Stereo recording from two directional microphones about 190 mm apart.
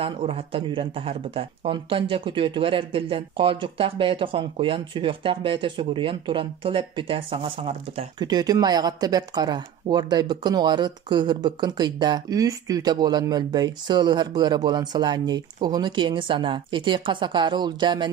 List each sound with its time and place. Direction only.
0.0 s speech: 30° right (ahead or behind)